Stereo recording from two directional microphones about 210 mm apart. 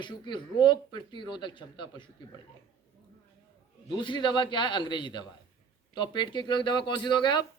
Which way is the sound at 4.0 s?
20° left (ahead or behind).